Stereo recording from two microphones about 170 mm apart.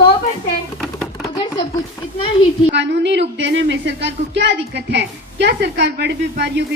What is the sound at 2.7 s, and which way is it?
Speech, 90° right.